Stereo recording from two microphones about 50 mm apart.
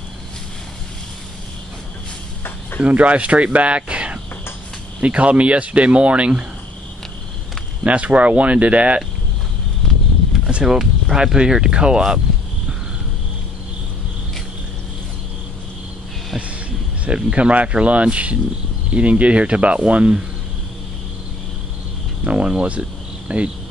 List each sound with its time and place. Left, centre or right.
2.8 s speech: right
7.8 s speech: right
10.5 s speech: centre
17.0 s speech: right
22.2 s cricket: right